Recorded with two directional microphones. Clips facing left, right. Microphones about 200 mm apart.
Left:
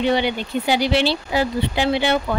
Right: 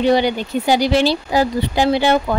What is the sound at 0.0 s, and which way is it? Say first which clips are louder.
Speech: right 4 dB; 40° right (ahead or behind).